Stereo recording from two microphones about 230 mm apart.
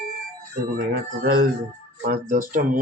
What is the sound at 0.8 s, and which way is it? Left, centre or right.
Speech, right.